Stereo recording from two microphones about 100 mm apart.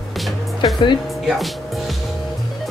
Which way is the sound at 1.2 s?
Centre (ahead or behind).